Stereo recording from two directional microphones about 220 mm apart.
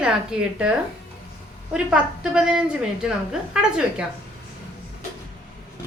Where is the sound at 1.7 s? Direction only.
5° right (ahead or behind).